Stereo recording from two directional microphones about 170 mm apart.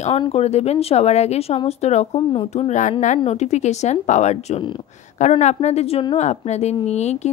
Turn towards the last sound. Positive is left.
turn(degrees=40)  # may be behind; listen again after turning